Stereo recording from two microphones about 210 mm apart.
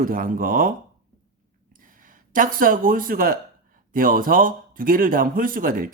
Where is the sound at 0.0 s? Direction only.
40° right (ahead or behind).